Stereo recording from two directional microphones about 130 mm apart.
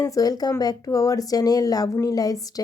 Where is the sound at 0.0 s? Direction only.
25° left (ahead or behind).